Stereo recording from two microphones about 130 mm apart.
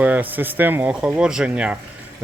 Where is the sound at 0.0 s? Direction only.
10° right (ahead or behind).